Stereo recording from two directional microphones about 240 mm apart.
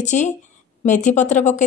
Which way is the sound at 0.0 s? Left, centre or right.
Left.